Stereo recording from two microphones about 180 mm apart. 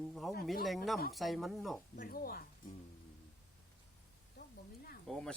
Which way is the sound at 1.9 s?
55° left (ahead or behind).